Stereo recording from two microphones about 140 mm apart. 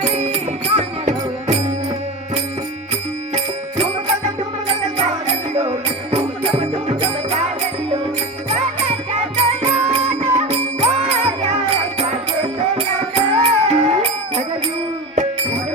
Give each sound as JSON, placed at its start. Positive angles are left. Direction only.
{"t": 0.0, "sound": "music", "side_deg": -50}
{"t": 4.9, "sound": "music", "side_deg": -50}
{"t": 9.3, "sound": "music", "side_deg": -50}